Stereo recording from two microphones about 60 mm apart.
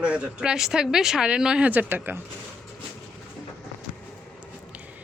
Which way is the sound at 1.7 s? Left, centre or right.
Right.